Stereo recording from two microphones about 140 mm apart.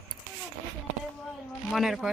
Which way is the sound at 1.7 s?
Centre (ahead or behind).